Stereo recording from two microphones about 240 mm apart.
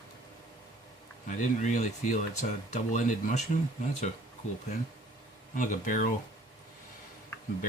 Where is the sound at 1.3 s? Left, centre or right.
Left.